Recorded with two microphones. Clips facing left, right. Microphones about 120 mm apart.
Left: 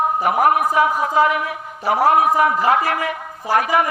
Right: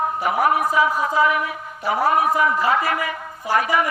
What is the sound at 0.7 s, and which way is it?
Speech, 60° left (ahead or behind).